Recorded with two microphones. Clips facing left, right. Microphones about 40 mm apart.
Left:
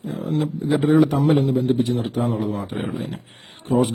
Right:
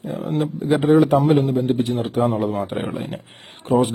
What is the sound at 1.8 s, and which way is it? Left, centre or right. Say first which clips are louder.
A man's voice: right 2 dB; right.